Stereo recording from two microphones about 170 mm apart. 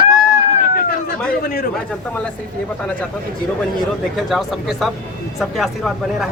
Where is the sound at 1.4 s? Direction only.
65° left (ahead or behind).